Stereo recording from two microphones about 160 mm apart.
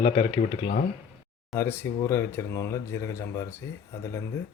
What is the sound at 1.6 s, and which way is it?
Speech, 15° left (ahead or behind).